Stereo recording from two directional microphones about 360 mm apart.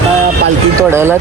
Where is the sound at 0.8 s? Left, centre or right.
Centre.